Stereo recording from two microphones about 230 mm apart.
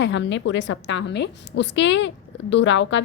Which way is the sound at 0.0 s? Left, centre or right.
Left.